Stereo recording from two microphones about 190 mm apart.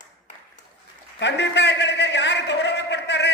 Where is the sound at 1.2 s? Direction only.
65° left (ahead or behind).